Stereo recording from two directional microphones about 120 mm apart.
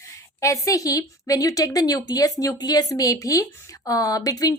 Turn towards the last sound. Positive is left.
turn(degrees=30)  # may be behind; listen again after turning